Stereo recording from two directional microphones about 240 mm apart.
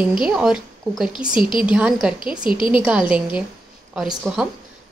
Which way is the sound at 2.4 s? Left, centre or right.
Left.